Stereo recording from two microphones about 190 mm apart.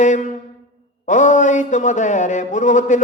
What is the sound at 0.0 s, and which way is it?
A man's voice, 40° left (ahead or behind).